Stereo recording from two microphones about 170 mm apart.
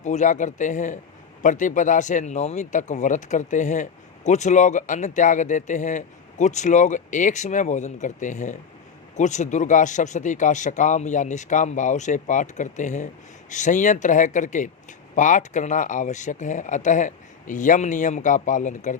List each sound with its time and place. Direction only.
0.0 s speech: 45° left (ahead or behind)